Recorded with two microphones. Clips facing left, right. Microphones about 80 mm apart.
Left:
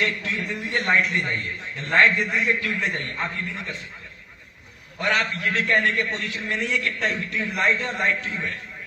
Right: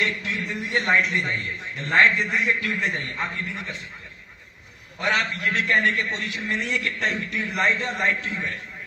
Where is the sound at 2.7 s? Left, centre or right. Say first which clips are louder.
Even; centre.